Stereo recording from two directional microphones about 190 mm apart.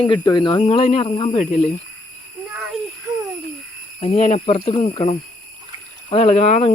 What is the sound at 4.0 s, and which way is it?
Speech, 35° left (ahead or behind).